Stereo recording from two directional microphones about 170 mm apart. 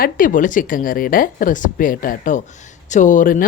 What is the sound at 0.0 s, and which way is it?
Speech, 50° left (ahead or behind).